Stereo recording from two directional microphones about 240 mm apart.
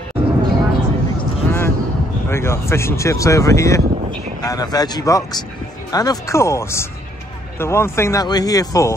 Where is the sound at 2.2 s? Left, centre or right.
Centre.